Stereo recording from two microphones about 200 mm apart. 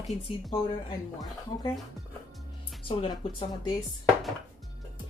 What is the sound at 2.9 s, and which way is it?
Speech, 25° left (ahead or behind).